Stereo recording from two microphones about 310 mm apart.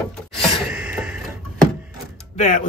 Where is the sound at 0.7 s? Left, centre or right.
Centre.